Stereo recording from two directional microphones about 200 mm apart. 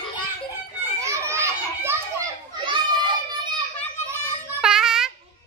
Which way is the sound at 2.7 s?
25° right (ahead or behind).